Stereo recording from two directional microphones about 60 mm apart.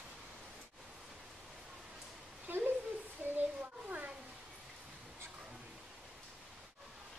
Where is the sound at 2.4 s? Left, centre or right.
Right.